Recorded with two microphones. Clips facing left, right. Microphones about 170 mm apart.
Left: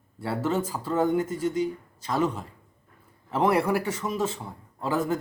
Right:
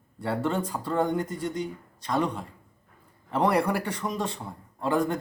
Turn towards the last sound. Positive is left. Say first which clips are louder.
# right 1 dB
turn(degrees=5)  # may be behind; listen again after turning